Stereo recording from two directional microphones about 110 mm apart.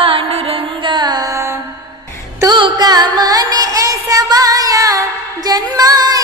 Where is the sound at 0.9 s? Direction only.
40° right (ahead or behind).